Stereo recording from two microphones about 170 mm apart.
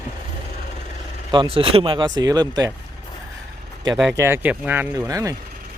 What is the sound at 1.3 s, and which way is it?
Speech, 30° right (ahead or behind).